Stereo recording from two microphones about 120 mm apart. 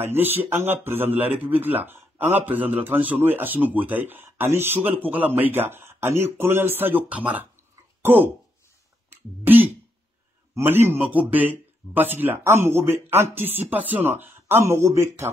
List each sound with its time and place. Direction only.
0.0 s speech: 15° right (ahead or behind)
9.1 s a sound: 15° right (ahead or behind)
10.5 s speech: 20° right (ahead or behind)